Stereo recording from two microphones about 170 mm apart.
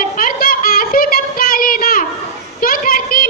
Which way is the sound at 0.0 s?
55° left (ahead or behind).